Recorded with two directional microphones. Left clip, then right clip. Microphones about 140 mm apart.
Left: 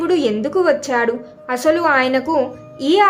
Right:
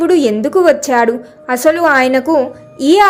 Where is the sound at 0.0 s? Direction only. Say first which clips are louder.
Right 6 dB; 30° right (ahead or behind).